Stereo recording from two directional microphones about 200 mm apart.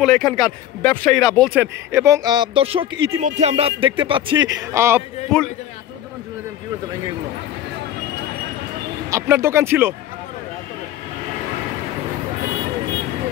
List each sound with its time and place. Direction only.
0.0 s speech: centre (ahead or behind)
1.6 s speech: 10° right (ahead or behind)
5.3 s speech: 5° left (ahead or behind)
9.1 s speech: 15° right (ahead or behind)